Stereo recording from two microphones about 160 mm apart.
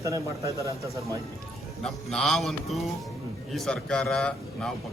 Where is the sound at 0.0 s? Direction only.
20° right (ahead or behind).